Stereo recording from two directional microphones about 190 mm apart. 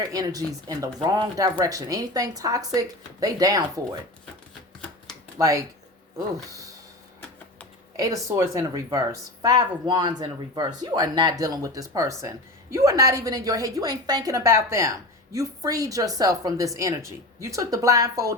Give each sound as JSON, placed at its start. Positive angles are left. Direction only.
{"t": 0.0, "sound": "speech", "side_deg": -20}
{"t": 5.4, "sound": "a woman's voice", "side_deg": -15}
{"t": 7.9, "sound": "a woman's voice", "side_deg": -15}